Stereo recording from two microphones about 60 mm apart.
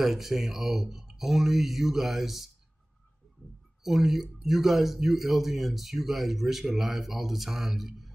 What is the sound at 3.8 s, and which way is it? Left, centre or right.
Speech, centre.